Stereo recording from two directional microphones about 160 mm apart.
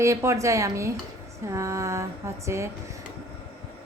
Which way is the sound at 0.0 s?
20° right (ahead or behind).